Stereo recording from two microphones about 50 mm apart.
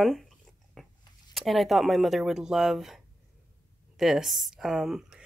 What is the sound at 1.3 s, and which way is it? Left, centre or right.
Speech, centre.